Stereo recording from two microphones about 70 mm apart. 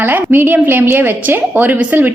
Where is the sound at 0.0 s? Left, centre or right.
Right.